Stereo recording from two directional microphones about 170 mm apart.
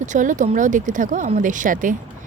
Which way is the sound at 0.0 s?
45° right (ahead or behind).